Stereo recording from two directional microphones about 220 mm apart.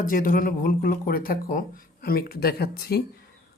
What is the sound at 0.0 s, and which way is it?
Speech, 40° left (ahead or behind).